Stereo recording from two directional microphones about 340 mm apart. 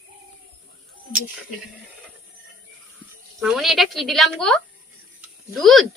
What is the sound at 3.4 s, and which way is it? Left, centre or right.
Speech, centre.